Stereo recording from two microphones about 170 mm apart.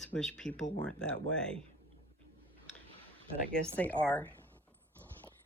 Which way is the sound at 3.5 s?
10° left (ahead or behind).